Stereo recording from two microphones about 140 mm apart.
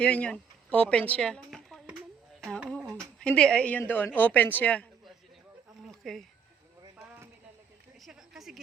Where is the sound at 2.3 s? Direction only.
5° left (ahead or behind).